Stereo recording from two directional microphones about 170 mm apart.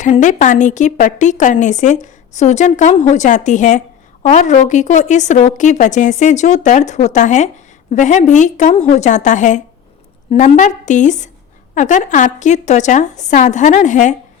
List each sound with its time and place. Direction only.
0.2 s speech: 50° left (ahead or behind)